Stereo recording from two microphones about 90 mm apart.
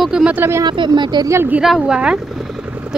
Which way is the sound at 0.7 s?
55° right (ahead or behind).